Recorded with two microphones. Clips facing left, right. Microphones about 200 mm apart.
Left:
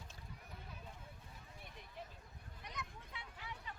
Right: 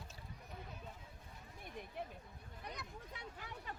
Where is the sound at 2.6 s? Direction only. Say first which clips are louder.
Right 2 dB; 40° right (ahead or behind).